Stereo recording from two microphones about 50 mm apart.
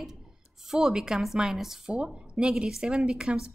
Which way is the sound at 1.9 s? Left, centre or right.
Right.